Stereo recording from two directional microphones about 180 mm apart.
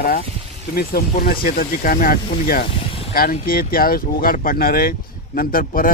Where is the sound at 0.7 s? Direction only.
55° left (ahead or behind).